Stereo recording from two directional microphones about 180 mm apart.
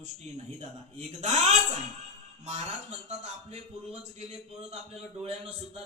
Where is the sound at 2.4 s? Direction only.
40° right (ahead or behind).